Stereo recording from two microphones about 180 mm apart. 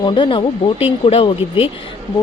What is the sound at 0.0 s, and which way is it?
A woman's voice, 25° left (ahead or behind).